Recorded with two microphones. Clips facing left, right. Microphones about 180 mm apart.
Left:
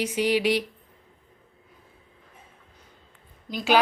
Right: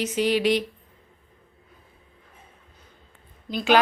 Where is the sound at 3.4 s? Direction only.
10° left (ahead or behind).